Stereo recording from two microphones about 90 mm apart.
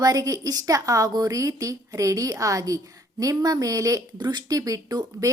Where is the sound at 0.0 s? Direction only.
40° right (ahead or behind).